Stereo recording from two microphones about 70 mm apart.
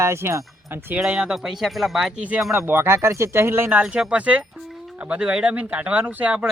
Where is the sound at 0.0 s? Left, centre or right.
Right.